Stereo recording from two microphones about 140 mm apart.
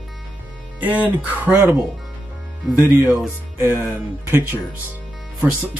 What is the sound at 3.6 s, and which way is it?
Speech, 15° right (ahead or behind).